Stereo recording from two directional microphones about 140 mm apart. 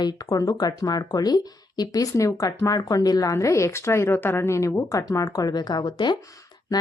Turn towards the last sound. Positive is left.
turn(degrees=30)  # may be behind; listen again after turning